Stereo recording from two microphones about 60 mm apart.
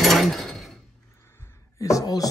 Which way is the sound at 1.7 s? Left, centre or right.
Left.